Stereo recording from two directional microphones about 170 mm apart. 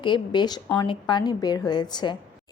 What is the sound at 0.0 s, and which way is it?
A woman's voice, 25° left (ahead or behind).